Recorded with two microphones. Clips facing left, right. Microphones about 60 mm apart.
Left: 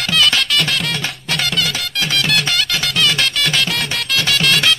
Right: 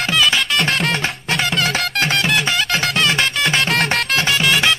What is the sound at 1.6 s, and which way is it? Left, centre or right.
Music, right.